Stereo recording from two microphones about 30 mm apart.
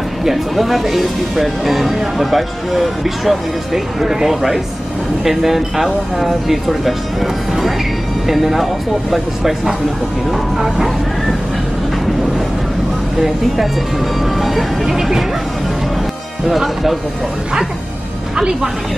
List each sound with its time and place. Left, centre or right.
0.2 s speech: centre
5.9 s speech: centre
14.3 s speech: centre
16.4 s speech: centre
18.3 s speech: right